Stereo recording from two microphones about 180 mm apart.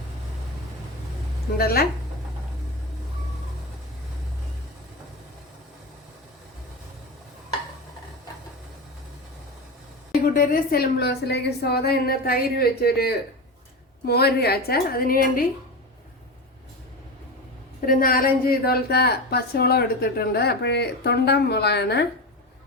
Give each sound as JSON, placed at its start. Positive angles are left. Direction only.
{"t": 1.5, "sound": "a woman's voice", "side_deg": 55}
{"t": 10.1, "sound": "a woman's voice", "side_deg": 50}
{"t": 17.7, "sound": "a woman's voice", "side_deg": 50}